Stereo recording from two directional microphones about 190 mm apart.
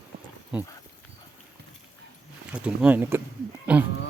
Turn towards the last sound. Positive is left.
turn(degrees=-5)  # may be behind; listen again after turning